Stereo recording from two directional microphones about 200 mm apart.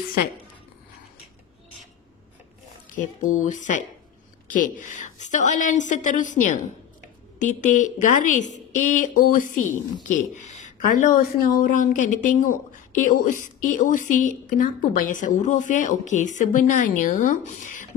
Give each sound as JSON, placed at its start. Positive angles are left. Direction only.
{"t": 3.3, "sound": "speech", "side_deg": 40}